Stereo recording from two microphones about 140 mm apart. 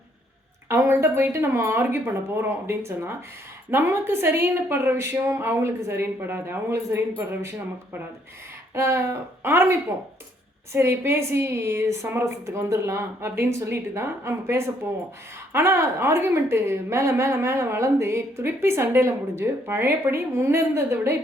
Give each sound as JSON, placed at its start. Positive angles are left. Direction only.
{"t": 0.7, "sound": "a woman's voice", "side_deg": -15}
{"t": 8.7, "sound": "a woman's voice", "side_deg": -20}